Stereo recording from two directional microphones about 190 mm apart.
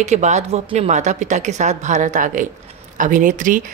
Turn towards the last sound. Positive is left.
turn(degrees=-40)  # may be behind; listen again after turning